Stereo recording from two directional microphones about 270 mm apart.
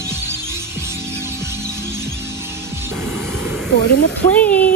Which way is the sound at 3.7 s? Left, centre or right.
Left.